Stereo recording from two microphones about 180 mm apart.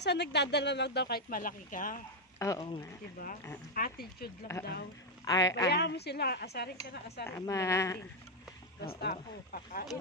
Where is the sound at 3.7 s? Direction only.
55° left (ahead or behind).